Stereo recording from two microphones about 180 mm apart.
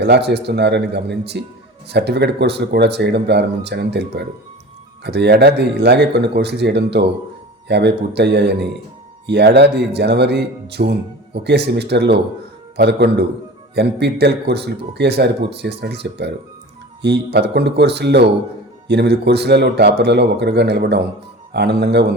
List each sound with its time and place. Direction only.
0.0 s speech: 70° right (ahead or behind)